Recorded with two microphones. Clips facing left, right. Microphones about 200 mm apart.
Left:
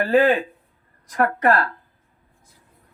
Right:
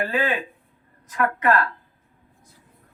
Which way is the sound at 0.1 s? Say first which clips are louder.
Left 8 dB; 40° left (ahead or behind).